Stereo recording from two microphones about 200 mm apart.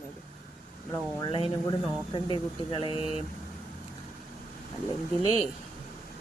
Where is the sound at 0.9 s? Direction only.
20° left (ahead or behind).